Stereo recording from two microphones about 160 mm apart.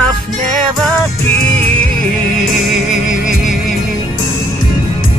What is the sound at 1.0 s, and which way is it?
Music, 10° left (ahead or behind).